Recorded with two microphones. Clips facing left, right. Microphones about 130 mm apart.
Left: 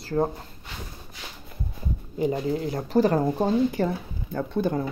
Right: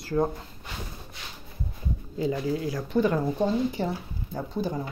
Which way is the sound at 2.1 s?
20° left (ahead or behind).